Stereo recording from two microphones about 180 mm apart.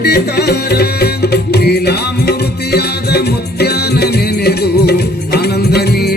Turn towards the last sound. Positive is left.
turn(degrees=60)  # may be behind; listen again after turning